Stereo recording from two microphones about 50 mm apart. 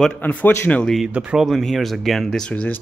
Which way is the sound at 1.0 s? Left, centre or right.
Centre.